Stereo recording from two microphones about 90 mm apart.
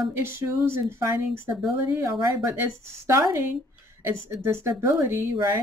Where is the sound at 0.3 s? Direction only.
30° right (ahead or behind).